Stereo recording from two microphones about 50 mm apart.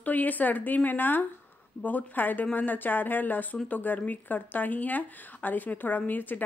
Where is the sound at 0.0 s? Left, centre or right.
Left.